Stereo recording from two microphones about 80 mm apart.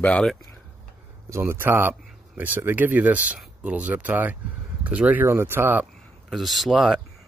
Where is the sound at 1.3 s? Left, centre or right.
Right.